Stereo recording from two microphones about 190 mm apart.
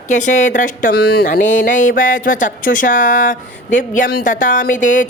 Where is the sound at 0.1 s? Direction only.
40° left (ahead or behind).